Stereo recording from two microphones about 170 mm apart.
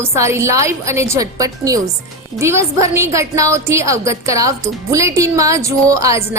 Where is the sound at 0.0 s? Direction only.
15° right (ahead or behind).